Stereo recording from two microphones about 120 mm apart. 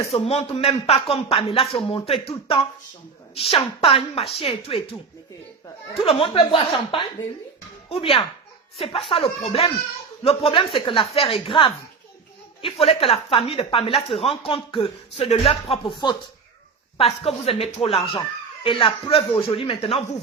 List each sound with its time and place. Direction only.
0.1 s speech: 55° left (ahead or behind)
3.3 s speech: 55° left (ahead or behind)
5.9 s speech: 50° left (ahead or behind)
15.2 s speech: 60° left (ahead or behind)
15.7 s speech: 40° left (ahead or behind)
17.0 s speech: 55° left (ahead or behind)